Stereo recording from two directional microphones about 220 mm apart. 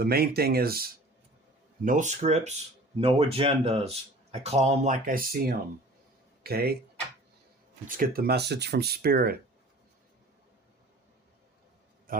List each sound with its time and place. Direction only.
0.0 s speech: 45° right (ahead or behind)
7.9 s speech: 40° right (ahead or behind)